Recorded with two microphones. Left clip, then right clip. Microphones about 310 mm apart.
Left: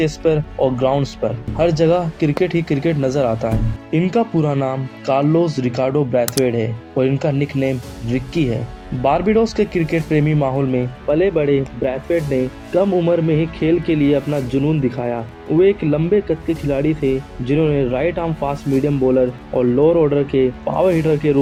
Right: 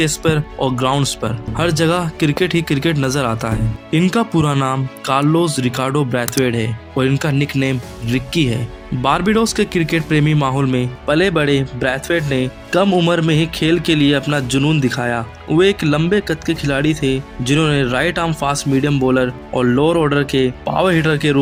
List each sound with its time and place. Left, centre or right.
0.0 s a man's voice: right